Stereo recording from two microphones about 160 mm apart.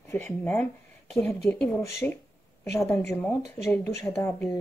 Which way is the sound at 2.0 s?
10° left (ahead or behind).